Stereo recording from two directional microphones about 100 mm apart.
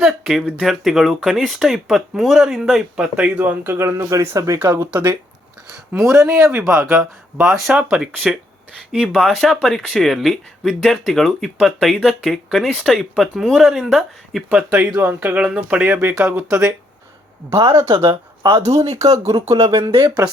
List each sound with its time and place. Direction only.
0.0 s speech: 5° right (ahead or behind); by 4.9 s 30° right (ahead or behind)
4.9 s speech: 20° right (ahead or behind)
6.0 s speech: 35° right (ahead or behind)
7.0 s speech: 15° right (ahead or behind)
14.5 s speech: 15° right (ahead or behind)
17.6 s speech: 30° right (ahead or behind)